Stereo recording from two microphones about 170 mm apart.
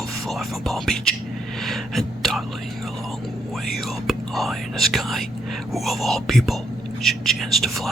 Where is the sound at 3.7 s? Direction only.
Centre (ahead or behind).